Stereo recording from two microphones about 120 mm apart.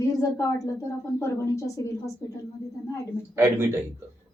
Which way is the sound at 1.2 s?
25° left (ahead or behind).